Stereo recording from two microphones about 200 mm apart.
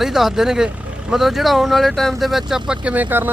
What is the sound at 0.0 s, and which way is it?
Speech, centre (ahead or behind).